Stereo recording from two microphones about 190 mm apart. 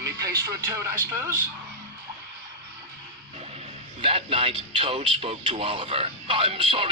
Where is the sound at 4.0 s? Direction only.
30° right (ahead or behind).